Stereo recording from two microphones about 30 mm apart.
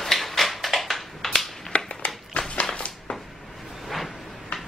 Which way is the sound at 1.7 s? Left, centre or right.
Left.